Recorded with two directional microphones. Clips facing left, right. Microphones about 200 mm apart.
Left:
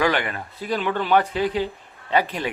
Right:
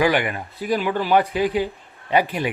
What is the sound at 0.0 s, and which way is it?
Speech, 10° right (ahead or behind).